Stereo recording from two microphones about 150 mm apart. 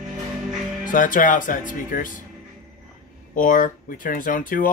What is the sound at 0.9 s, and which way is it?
Speech, 60° left (ahead or behind).